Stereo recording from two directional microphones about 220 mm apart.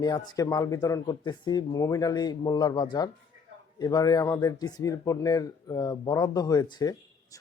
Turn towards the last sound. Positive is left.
turn(degrees=15)  # may be behind; listen again after turning